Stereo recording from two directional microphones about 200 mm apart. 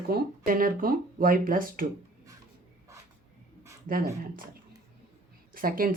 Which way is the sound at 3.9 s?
45° right (ahead or behind).